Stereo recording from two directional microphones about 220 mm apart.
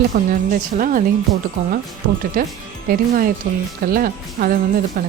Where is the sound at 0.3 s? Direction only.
40° right (ahead or behind).